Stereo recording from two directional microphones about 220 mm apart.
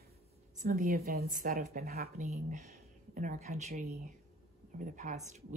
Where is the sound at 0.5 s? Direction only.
40° right (ahead or behind).